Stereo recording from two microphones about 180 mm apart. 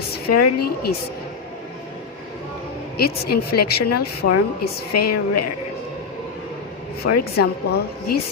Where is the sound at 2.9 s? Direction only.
60° left (ahead or behind).